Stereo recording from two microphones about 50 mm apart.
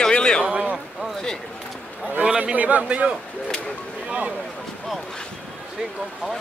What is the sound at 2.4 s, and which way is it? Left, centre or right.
A man's voice, right.